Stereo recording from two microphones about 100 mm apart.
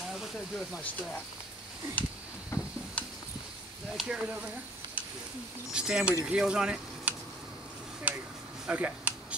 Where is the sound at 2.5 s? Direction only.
25° left (ahead or behind).